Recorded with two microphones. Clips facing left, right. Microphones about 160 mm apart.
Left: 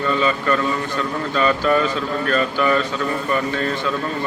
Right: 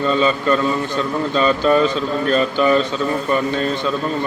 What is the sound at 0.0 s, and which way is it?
A man's voice, 25° right (ahead or behind).